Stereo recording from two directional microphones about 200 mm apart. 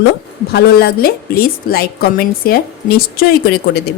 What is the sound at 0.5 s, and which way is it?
Speech, 50° left (ahead or behind).